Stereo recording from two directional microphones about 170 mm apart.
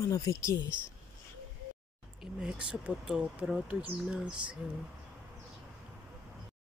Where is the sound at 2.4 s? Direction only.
5° right (ahead or behind).